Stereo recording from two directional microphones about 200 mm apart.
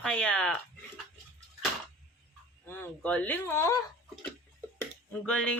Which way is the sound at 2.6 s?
10° left (ahead or behind).